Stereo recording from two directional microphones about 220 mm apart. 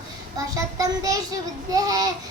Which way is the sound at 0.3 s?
15° right (ahead or behind).